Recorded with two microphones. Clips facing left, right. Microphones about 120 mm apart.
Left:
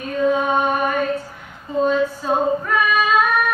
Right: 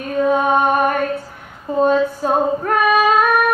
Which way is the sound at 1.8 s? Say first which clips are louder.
Right 3 dB; 45° right (ahead or behind).